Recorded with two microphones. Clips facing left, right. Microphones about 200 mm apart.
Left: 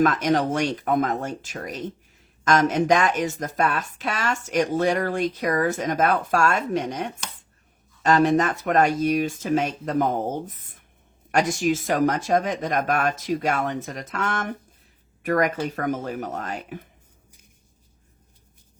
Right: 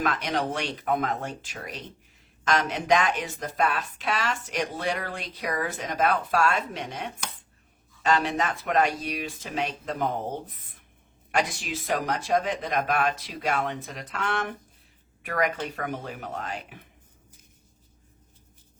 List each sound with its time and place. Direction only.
0.0 s speech: 45° left (ahead or behind)